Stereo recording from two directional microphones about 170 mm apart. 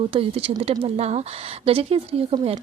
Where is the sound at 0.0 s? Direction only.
35° right (ahead or behind).